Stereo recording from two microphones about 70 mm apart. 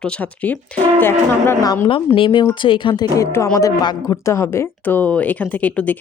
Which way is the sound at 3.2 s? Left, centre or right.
Left.